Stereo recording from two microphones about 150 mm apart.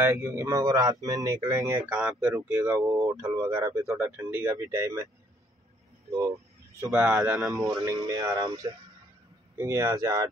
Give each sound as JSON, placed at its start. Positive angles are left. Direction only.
{"t": 0.0, "sound": "speech", "side_deg": -15}
{"t": 2.3, "sound": "speech", "side_deg": -15}
{"t": 6.0, "sound": "speech", "side_deg": -20}
{"t": 6.9, "sound": "speech", "side_deg": -10}
{"t": 7.5, "sound": "speech", "side_deg": -20}